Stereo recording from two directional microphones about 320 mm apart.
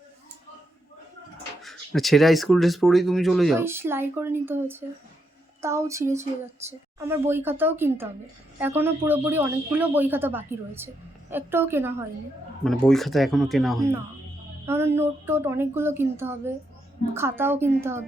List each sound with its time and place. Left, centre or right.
1.6 s a man's voice: centre